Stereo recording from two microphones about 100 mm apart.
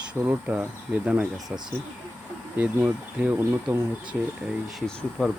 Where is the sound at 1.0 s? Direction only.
15° right (ahead or behind).